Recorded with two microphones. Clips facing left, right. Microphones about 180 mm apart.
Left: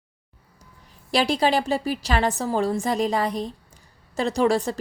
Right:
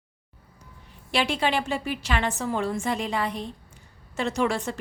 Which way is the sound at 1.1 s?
35° left (ahead or behind).